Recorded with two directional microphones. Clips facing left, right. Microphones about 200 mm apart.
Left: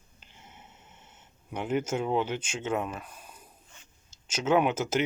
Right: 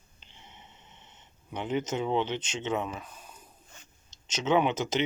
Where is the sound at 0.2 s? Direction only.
5° left (ahead or behind).